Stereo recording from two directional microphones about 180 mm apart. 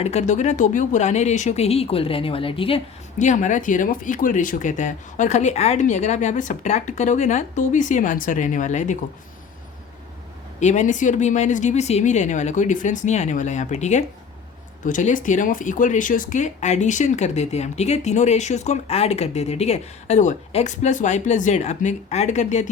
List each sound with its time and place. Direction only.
0.0 s speech: 40° left (ahead or behind)
10.6 s speech: 40° left (ahead or behind)